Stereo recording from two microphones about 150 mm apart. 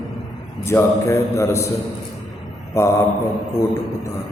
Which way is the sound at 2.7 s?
20° left (ahead or behind).